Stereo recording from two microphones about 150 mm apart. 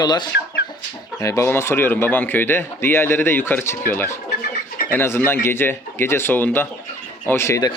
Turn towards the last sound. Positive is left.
turn(degrees=20)  # may be behind; listen again after turning